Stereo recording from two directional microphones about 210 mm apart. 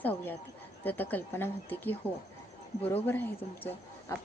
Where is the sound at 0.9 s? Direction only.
10° left (ahead or behind).